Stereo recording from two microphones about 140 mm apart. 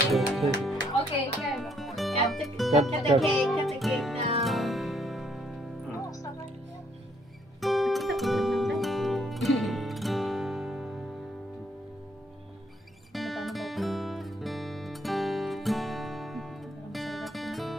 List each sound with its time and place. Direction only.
0.1 s music: centre (ahead or behind)
2.7 s speech: 55° right (ahead or behind)
3.2 s speech: centre (ahead or behind)
3.8 s music: centre (ahead or behind)
7.6 s music: centre (ahead or behind)
13.1 s music: centre (ahead or behind)